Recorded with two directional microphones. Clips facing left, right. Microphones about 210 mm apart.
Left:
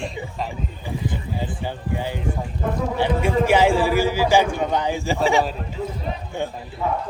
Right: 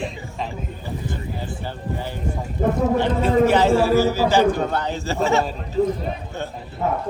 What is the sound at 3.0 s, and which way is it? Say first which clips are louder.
A man's voice: even; 10° left (ahead or behind).